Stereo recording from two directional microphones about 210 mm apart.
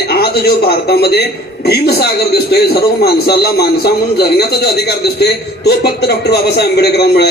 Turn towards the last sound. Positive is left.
turn(degrees=50)  # may be behind; listen again after turning